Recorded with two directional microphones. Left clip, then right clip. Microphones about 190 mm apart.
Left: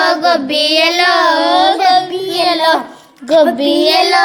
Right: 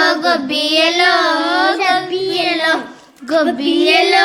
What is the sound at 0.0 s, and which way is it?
Child singing, 20° left (ahead or behind).